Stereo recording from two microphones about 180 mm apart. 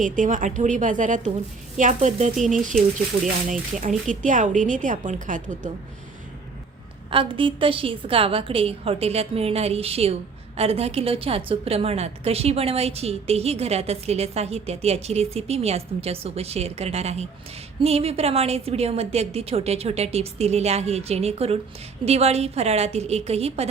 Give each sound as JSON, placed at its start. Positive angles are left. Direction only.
{"t": 0.0, "sound": "a woman's voice", "side_deg": -45}
{"t": 7.1, "sound": "a woman's voice", "side_deg": -30}